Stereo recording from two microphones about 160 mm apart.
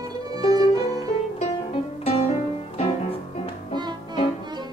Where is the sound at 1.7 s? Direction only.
35° left (ahead or behind).